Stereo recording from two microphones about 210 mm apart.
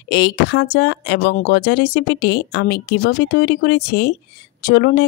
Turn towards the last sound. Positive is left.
turn(degrees=50)  # may be behind; listen again after turning